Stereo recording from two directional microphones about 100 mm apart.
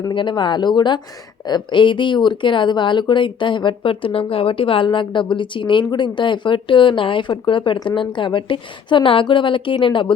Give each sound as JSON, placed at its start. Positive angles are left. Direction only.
{"t": 0.1, "sound": "speech", "side_deg": 55}